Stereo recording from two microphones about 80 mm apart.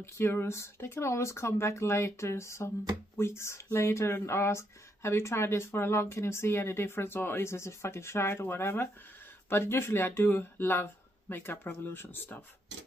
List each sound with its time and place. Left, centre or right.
0.0 s speech: left